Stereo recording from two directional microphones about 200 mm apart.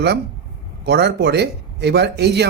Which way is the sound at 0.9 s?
55° right (ahead or behind).